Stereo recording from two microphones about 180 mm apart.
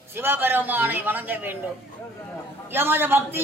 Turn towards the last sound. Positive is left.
turn(degrees=-10)  # may be behind; listen again after turning